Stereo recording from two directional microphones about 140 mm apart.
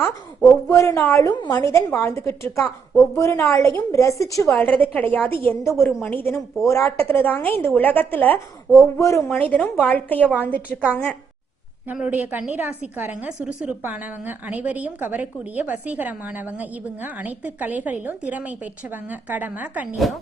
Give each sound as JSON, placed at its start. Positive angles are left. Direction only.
{"t": 0.7, "sound": "a woman's voice", "side_deg": 20}
{"t": 3.2, "sound": "a woman's voice", "side_deg": 20}
{"t": 4.5, "sound": "a woman's voice", "side_deg": 10}
{"t": 9.3, "sound": "a woman's voice", "side_deg": 10}
{"t": 11.9, "sound": "a woman's voice", "side_deg": -10}